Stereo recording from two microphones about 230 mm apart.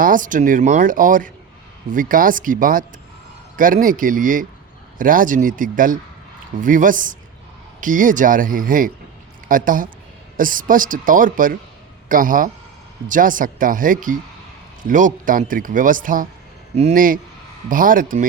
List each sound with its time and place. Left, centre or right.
0.0 s speech: right